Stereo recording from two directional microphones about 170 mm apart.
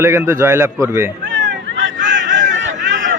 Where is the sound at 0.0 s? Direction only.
15° right (ahead or behind).